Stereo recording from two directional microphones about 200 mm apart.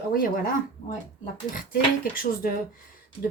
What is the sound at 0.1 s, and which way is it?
Speech, 45° left (ahead or behind).